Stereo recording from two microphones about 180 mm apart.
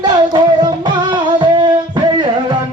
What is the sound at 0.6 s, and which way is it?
Music, 25° right (ahead or behind).